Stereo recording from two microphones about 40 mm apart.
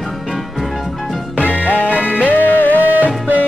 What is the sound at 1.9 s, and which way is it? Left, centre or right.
Music, right.